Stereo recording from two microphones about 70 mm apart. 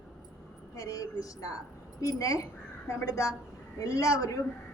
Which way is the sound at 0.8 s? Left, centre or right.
Left.